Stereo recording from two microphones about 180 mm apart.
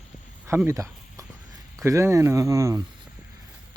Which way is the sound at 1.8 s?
15° right (ahead or behind).